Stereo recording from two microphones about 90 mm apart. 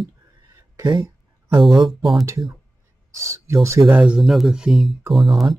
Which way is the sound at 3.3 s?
35° right (ahead or behind).